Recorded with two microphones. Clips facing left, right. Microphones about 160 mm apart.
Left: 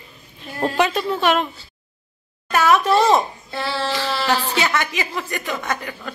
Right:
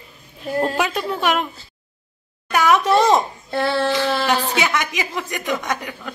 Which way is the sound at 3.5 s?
55° right (ahead or behind).